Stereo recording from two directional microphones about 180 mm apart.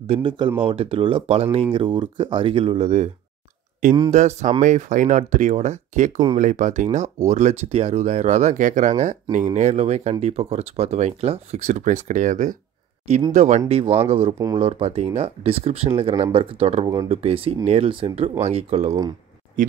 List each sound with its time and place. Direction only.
0.1 s speech: 25° right (ahead or behind)
4.1 s speech: 40° right (ahead or behind)